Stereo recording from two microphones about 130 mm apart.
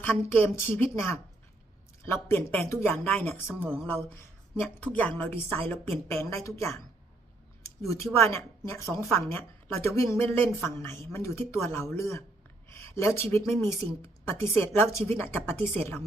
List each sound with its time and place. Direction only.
0.0 s a woman's voice: 15° left (ahead or behind)
3.6 s speech: 10° right (ahead or behind)
4.8 s a woman's voice: 10° left (ahead or behind)